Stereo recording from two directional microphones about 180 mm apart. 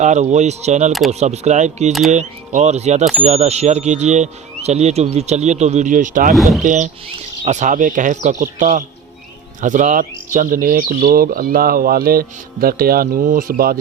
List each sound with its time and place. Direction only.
0.0 s speech: 40° right (ahead or behind)
6.3 s speech: centre (ahead or behind)
6.6 s speech: 45° right (ahead or behind)